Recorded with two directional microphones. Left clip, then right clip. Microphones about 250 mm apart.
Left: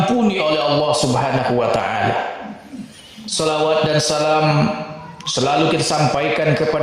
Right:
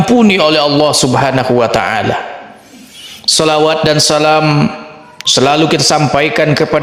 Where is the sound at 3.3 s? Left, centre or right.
Right.